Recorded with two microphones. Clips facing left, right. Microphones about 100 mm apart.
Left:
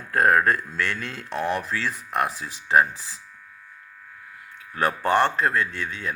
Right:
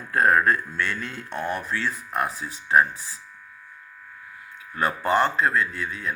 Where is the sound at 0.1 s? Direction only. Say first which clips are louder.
Even; 65° left (ahead or behind); by 3.2 s 90° left.